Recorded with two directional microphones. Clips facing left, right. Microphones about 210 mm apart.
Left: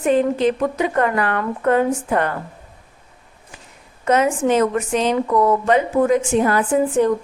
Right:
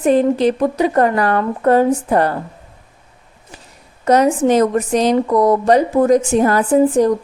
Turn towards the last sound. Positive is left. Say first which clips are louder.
# right 4 dB
turn(degrees=-40)  # may be behind; listen again after turning